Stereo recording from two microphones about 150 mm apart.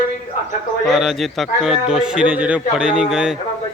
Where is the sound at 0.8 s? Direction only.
Centre (ahead or behind).